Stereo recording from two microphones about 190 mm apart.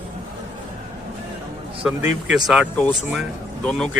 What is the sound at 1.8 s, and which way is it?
A man's voice, 5° right (ahead or behind).